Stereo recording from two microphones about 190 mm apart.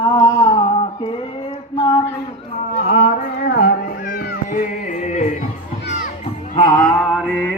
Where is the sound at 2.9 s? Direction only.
55° left (ahead or behind).